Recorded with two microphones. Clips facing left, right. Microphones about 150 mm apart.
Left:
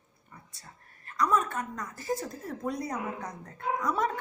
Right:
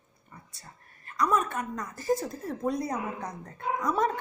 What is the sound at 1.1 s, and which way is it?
A woman's voice, 15° right (ahead or behind).